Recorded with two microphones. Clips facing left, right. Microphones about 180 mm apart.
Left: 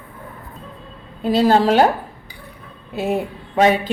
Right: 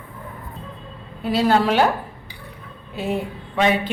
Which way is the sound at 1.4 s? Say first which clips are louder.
Left 3 dB; 40° left (ahead or behind).